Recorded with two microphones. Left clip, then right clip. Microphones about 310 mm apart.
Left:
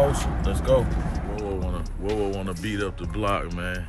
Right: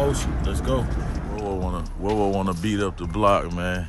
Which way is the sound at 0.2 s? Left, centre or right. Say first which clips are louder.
Even; centre.